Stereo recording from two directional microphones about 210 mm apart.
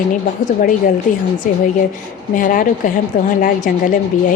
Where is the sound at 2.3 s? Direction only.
40° left (ahead or behind).